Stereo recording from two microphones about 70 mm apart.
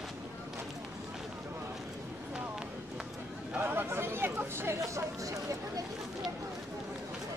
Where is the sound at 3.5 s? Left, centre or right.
Right.